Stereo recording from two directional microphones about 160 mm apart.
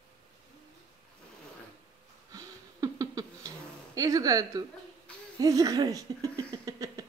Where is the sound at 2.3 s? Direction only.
20° right (ahead or behind).